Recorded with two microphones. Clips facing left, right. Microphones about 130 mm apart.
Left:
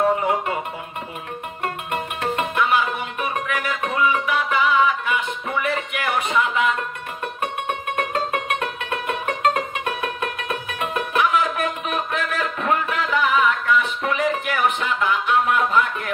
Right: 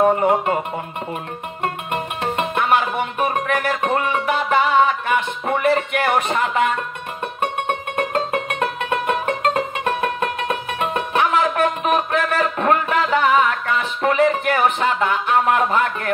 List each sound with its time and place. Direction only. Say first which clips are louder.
0.0 s music: right 4 dB; 55° right (ahead or behind)
1.6 s music: right 3 dB; 25° right (ahead or behind)
2.5 s music: right 3 dB; 55° right (ahead or behind)
5.9 s a sound: right 3 dB; 60° right (ahead or behind)
8.1 s music: right 2 dB; 40° right (ahead or behind)
11.3 s music: right 4 dB; 65° right (ahead or behind)
12.2 s a sound: right 5 dB; 65° right (ahead or behind)
12.9 s music: right 4 dB; 65° right (ahead or behind)